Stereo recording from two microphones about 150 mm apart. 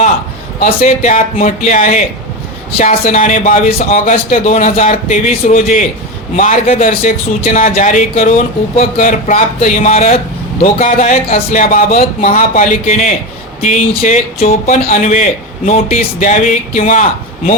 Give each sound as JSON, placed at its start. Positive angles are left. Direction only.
{"t": 0.9, "sound": "a man's voice", "side_deg": 55}
{"t": 3.7, "sound": "a man's voice", "side_deg": 40}
{"t": 3.9, "sound": "a man's voice", "side_deg": 55}
{"t": 11.3, "sound": "a man's voice", "side_deg": 65}